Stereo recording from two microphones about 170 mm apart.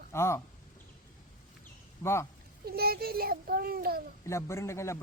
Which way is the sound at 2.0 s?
20° left (ahead or behind).